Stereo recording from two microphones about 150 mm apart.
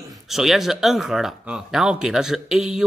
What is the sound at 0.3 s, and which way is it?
Speech, centre (ahead or behind).